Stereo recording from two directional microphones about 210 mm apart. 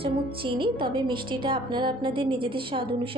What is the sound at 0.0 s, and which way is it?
A woman's voice, 25° right (ahead or behind).